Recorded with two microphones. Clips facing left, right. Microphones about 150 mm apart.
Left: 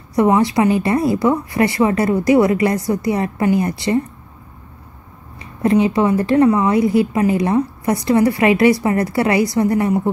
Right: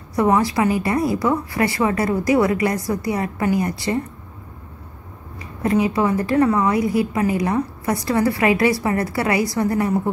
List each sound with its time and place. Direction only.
0.1 s a woman's voice: 20° left (ahead or behind)
5.6 s a woman's voice: 25° left (ahead or behind)